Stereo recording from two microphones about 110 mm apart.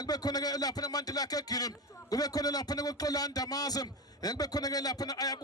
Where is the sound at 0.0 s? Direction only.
35° left (ahead or behind).